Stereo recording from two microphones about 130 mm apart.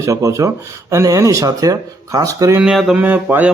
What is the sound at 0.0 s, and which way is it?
Speech, 25° right (ahead or behind).